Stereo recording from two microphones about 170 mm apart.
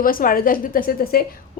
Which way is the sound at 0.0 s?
55° left (ahead or behind).